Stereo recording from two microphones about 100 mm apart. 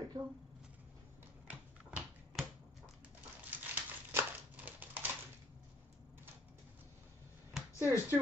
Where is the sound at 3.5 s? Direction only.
20° right (ahead or behind).